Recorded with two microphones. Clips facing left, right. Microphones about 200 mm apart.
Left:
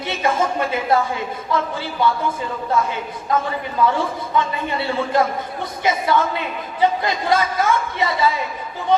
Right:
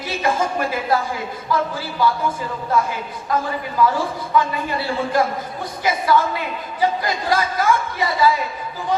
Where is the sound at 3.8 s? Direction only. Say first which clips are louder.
Even; 25° left (ahead or behind).